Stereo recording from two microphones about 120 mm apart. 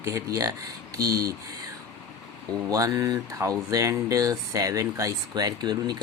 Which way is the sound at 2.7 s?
30° right (ahead or behind).